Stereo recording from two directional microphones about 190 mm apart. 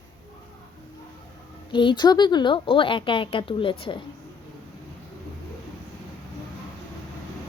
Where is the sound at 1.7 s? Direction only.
25° left (ahead or behind).